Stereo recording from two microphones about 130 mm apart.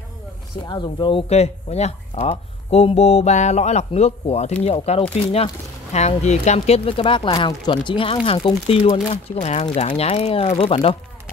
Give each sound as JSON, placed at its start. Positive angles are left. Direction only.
{"t": 0.7, "sound": "speech", "side_deg": 35}
{"t": 1.3, "sound": "speech", "side_deg": 55}
{"t": 9.8, "sound": "speech", "side_deg": 50}